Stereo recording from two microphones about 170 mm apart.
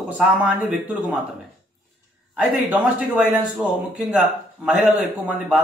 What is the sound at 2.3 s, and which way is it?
Speech, 10° right (ahead or behind).